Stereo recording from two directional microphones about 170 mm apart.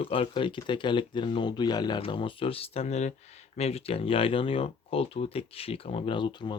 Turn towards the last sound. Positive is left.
turn(degrees=25)  # may be behind; listen again after turning